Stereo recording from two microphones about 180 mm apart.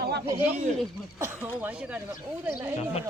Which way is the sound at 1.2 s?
10° right (ahead or behind).